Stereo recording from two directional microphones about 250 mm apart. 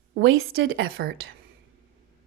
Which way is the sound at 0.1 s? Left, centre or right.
Right.